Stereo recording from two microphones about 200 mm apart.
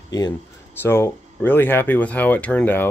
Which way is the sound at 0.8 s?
10° left (ahead or behind).